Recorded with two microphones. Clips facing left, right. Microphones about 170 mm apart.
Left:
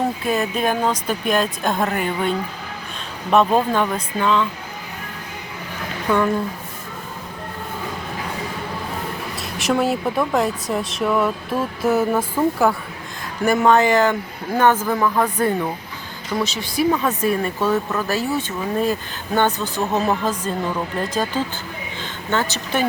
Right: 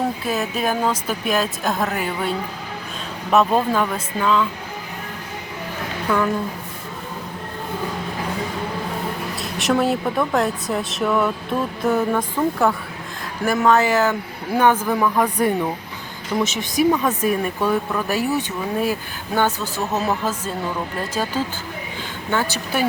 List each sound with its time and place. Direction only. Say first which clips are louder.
0.3 s a woman's voice: left 2 dB; 5° right (ahead or behind)
3.3 s a woman's voice: left 1 dB; 5° right (ahead or behind)
6.1 s a woman's voice: left 2 dB; centre (ahead or behind)
9.4 s a woman's voice: even; centre (ahead or behind)
21.0 s speech: left 1 dB; 10° right (ahead or behind)